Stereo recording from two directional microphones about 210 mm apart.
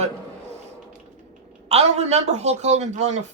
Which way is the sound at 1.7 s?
30° right (ahead or behind).